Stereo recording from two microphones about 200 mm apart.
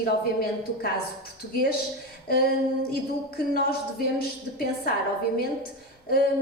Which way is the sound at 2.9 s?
50° left (ahead or behind).